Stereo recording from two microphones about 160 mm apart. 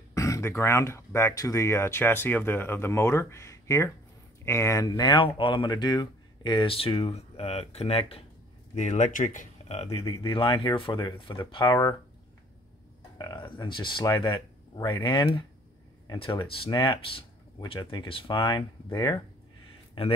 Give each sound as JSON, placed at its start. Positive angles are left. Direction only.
{"t": 0.1, "sound": "speech", "side_deg": 20}
{"t": 13.2, "sound": "speech", "side_deg": 25}
{"t": 20.0, "sound": "speech", "side_deg": 35}